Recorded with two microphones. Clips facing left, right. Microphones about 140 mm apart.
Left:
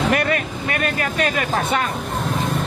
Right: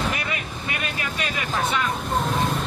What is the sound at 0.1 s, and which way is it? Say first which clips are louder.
Speech: left 9 dB; 55° left (ahead or behind).